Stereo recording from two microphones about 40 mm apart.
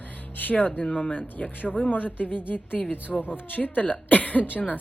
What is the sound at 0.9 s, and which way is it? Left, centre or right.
Speech, left.